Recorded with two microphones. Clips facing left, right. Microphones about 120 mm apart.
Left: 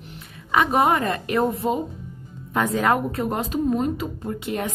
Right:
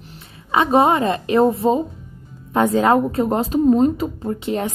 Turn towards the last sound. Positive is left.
turn(degrees=-25)  # may be behind; listen again after turning